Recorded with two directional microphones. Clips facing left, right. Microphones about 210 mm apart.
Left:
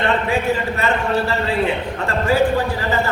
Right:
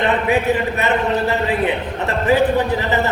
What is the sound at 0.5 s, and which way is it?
A man's voice, 20° right (ahead or behind).